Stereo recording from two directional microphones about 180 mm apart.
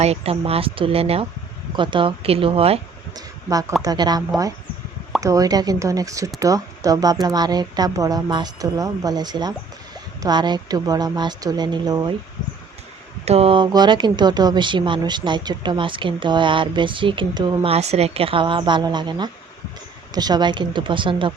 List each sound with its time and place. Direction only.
0.0 s speech: 35° right (ahead or behind)
3.2 s speech: 20° right (ahead or behind)
5.2 s speech: 20° right (ahead or behind)
13.2 s speech: 35° right (ahead or behind)